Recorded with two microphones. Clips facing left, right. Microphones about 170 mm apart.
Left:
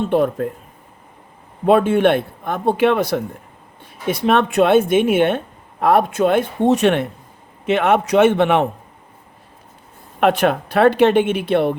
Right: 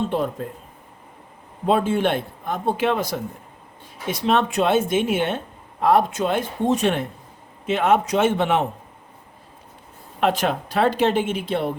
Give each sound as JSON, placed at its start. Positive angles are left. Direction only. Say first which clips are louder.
{"t": 0.1, "sound": "speech", "louder": "left 7 dB", "side_deg": 60}
{"t": 1.6, "sound": "a man's voice", "louder": "left 6 dB", "side_deg": 65}
{"t": 10.2, "sound": "speech", "louder": "left 5 dB", "side_deg": 60}